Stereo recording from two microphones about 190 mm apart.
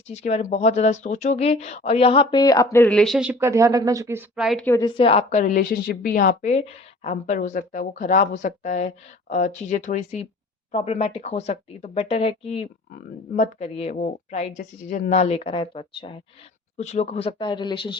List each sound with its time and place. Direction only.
0.1 s speech: 35° left (ahead or behind); by 4.2 s 15° right (ahead or behind)
4.4 s a woman's voice: centre (ahead or behind)
4.6 s speech: 15° left (ahead or behind); by 14.6 s 35° left (ahead or behind)
14.6 s speech: 50° left (ahead or behind); by 17.9 s 25° left (ahead or behind)